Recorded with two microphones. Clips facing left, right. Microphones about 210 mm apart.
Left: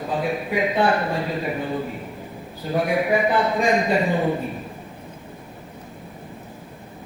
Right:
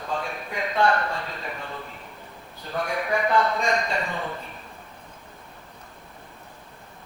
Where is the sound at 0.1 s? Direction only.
15° left (ahead or behind).